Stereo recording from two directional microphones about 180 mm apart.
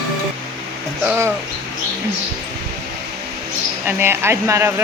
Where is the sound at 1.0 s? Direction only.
10° right (ahead or behind).